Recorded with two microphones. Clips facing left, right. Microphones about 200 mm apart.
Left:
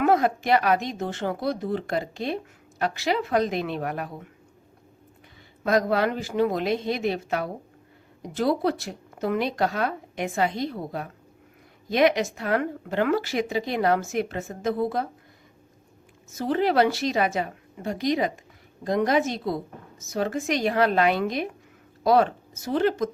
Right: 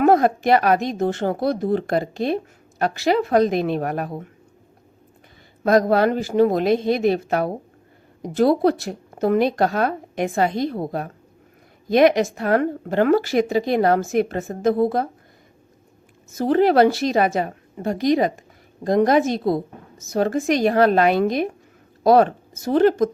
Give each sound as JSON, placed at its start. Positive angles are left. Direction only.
{"t": 0.0, "sound": "speech", "side_deg": -40}
{"t": 5.6, "sound": "speech", "side_deg": -40}
{"t": 16.4, "sound": "speech", "side_deg": -45}